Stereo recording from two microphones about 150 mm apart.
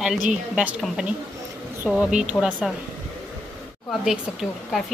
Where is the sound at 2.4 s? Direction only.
15° left (ahead or behind).